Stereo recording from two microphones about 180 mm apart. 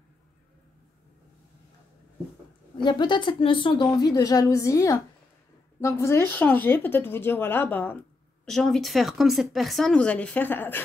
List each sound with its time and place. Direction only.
2.8 s a woman's voice: 25° left (ahead or behind)